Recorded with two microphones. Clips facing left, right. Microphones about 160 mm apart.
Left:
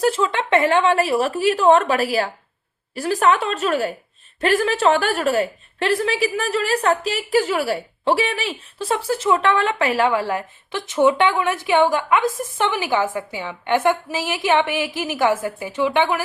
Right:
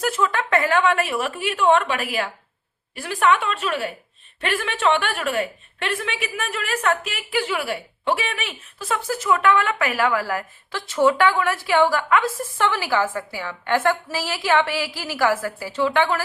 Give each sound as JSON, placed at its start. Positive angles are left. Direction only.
{"t": 0.0, "sound": "a woman's voice", "side_deg": 25}